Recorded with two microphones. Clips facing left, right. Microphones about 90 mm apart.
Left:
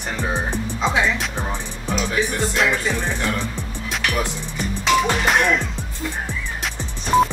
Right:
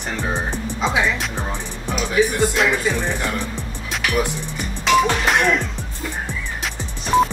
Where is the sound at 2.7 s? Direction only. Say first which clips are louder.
Right 2 dB; 15° right (ahead or behind).